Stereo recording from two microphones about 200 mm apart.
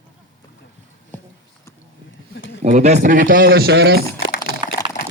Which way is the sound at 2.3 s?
65° left (ahead or behind).